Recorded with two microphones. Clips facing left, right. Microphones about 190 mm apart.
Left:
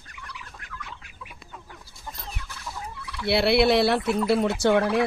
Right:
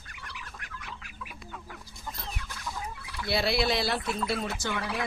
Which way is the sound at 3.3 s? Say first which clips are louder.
Left 8 dB; 65° left (ahead or behind).